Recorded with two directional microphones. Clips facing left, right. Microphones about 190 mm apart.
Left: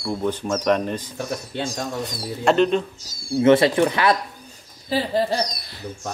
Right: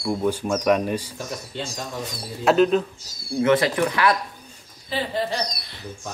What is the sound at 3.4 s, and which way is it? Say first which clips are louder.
Speech: left 4 dB; 25° left (ahead or behind).